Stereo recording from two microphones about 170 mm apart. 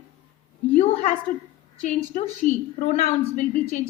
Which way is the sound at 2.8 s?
45° left (ahead or behind).